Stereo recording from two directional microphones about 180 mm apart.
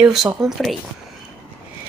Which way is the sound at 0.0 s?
Centre (ahead or behind).